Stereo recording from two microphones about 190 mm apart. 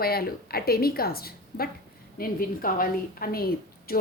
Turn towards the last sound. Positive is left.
turn(degrees=50)  # may be behind; listen again after turning